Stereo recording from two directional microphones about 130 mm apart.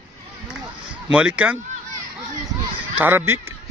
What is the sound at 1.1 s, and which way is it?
Speech, 10° right (ahead or behind).